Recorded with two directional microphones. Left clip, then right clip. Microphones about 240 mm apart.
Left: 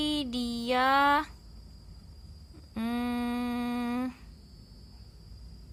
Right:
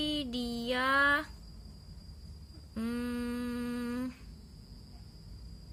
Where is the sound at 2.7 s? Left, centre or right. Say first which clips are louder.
Left 4 dB; left.